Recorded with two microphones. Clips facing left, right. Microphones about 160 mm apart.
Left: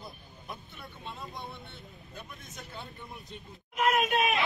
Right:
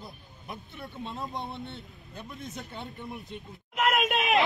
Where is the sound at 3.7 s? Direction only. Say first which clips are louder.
Even; 75° right (ahead or behind).